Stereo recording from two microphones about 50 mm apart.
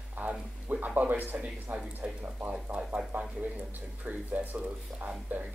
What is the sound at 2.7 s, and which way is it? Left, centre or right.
Speech, right.